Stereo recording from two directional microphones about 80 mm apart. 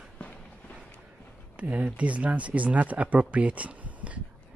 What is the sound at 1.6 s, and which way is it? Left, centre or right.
Speech, centre.